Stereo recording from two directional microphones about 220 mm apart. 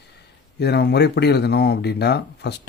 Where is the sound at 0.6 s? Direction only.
50° left (ahead or behind).